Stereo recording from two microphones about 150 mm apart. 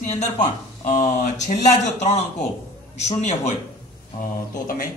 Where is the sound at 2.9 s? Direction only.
50° left (ahead or behind).